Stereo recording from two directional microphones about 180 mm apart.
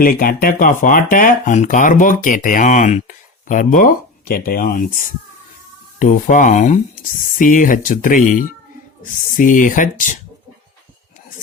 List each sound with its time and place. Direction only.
0.0 s speech: 55° left (ahead or behind)
6.0 s speech: 45° left (ahead or behind)